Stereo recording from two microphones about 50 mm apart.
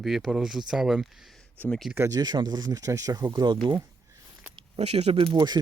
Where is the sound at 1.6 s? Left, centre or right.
Left.